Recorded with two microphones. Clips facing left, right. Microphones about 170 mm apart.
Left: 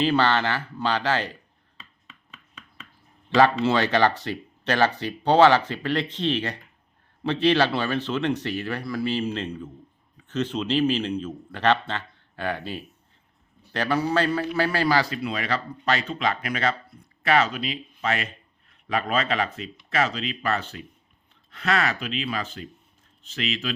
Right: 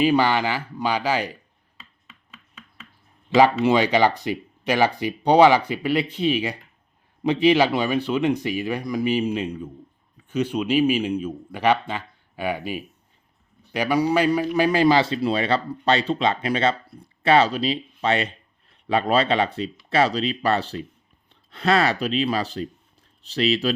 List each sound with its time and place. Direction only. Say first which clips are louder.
0.0 s speech: right 3 dB; 10° right (ahead or behind)
1.8 s chopping: even; 5° right (ahead or behind)
3.2 s a man's voice: right 3 dB; 15° right (ahead or behind); by 23.7 s 35° right (ahead or behind)